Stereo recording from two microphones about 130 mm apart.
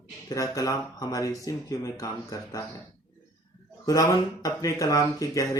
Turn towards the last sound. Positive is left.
turn(degrees=25)  # may be behind; listen again after turning